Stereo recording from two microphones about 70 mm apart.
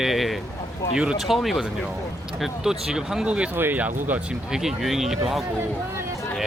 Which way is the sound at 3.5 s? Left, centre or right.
Right.